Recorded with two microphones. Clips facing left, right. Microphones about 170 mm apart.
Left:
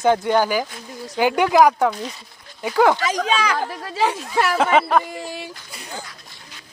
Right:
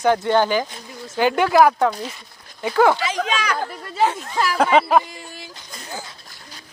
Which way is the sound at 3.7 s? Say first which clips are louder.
Right 1 dB; 90° left.